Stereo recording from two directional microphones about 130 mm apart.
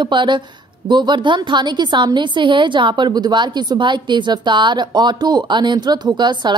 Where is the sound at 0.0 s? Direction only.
40° right (ahead or behind).